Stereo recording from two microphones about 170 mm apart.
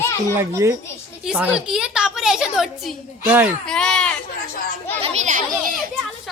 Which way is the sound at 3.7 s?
5° left (ahead or behind).